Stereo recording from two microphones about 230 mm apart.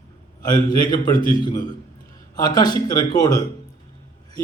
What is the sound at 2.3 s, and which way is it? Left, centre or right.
A man's voice, centre.